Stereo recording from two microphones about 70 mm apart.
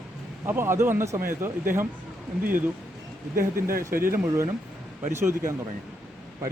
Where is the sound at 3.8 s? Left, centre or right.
Right.